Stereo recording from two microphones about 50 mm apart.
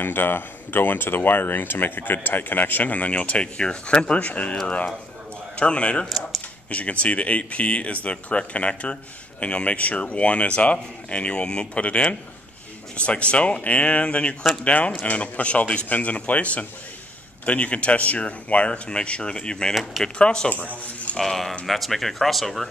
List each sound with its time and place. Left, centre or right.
0.0 s speech: left
5.6 s speech: left
19.7 s speech: centre
20.2 s speech: left
21.2 s speech: centre